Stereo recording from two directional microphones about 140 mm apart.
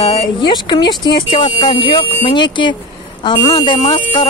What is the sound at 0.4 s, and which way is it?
Speech, 30° left (ahead or behind).